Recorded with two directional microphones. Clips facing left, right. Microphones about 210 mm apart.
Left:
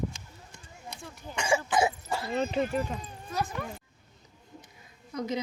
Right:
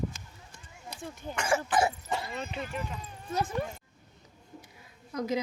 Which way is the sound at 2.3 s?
40° left (ahead or behind).